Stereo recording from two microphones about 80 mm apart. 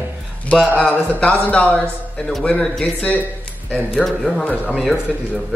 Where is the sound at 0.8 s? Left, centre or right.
Centre.